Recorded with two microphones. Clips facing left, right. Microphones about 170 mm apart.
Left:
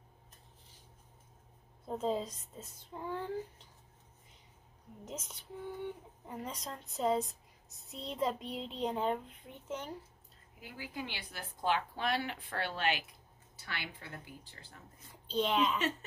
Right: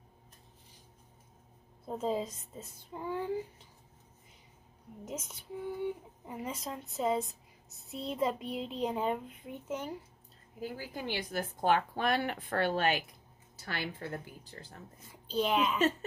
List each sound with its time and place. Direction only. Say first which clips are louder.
1.9 s speech: right 1 dB; 5° right (ahead or behind)
5.0 s a child's voice: right 3 dB; 10° right (ahead or behind)
10.6 s a woman's voice: right 4 dB; 40° right (ahead or behind)
15.2 s a child's voice: right 1 dB; 5° right (ahead or behind)